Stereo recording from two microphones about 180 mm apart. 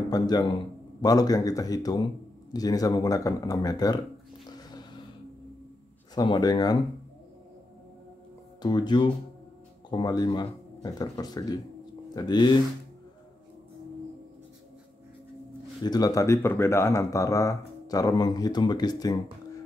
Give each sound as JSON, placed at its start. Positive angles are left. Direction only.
{"t": 0.1, "sound": "speech", "side_deg": 20}
{"t": 4.5, "sound": "a sound", "side_deg": 20}
{"t": 6.1, "sound": "speech", "side_deg": 20}
{"t": 8.6, "sound": "speech", "side_deg": 25}
{"t": 15.8, "sound": "speech", "side_deg": 20}